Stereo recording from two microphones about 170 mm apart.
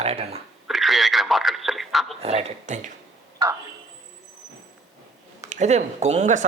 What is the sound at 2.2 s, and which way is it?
Speech, 40° right (ahead or behind).